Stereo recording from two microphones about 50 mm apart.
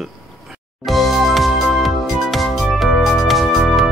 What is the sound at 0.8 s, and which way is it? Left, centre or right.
Music, centre.